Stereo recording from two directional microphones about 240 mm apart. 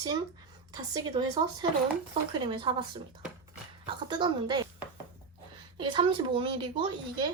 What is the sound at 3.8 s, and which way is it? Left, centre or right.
Speech, centre.